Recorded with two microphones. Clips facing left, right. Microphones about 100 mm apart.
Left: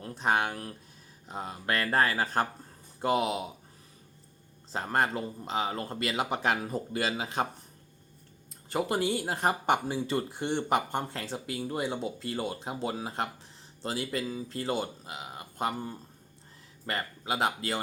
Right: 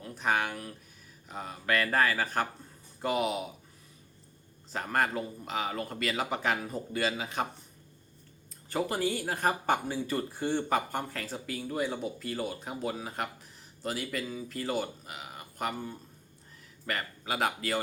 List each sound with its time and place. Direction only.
0.0 s speech: 30° left (ahead or behind)
4.7 s speech: 25° left (ahead or behind)
8.7 s speech: 25° left (ahead or behind)